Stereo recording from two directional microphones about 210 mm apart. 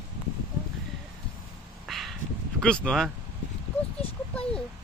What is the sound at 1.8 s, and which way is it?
Bow-wow, centre (ahead or behind).